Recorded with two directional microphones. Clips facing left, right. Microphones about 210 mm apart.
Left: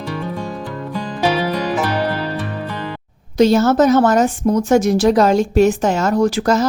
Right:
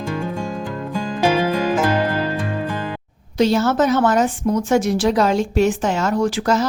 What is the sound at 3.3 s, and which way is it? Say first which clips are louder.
A woman's voice: left 4 dB; 45° left (ahead or behind).